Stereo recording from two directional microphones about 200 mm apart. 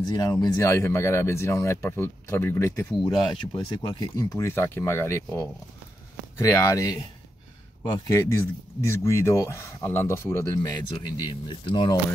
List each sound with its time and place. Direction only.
0.0 s speech: 20° left (ahead or behind)
3.5 s speech: 20° left (ahead or behind)